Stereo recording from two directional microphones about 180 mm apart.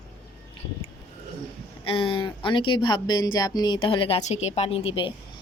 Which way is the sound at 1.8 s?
30° left (ahead or behind).